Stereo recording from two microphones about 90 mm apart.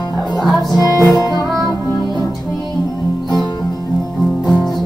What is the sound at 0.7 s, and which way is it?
Music, 45° left (ahead or behind).